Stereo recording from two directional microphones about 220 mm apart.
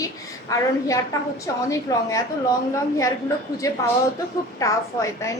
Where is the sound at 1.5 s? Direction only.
15° left (ahead or behind).